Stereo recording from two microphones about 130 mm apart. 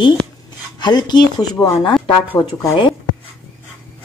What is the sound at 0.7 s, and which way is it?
A woman's voice, 35° left (ahead or behind).